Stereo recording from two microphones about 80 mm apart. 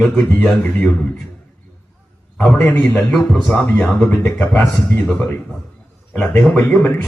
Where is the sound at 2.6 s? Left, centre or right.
Centre.